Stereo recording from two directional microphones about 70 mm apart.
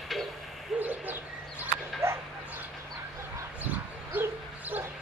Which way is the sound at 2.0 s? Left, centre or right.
Right.